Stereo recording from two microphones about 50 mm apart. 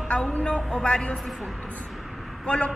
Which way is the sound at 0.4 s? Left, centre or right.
Centre.